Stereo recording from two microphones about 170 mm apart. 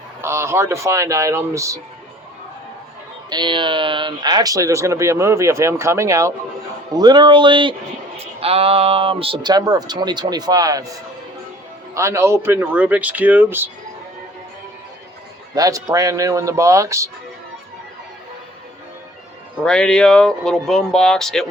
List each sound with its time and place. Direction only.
0.2 s speech: 15° right (ahead or behind)
3.2 s speech: 25° right (ahead or behind); by 13.7 s 10° right (ahead or behind)
15.5 s speech: 20° right (ahead or behind)
19.6 s speech: 5° left (ahead or behind)